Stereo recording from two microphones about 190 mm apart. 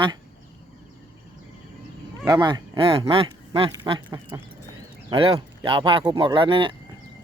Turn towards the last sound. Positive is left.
turn(degrees=-25)  # may be behind; listen again after turning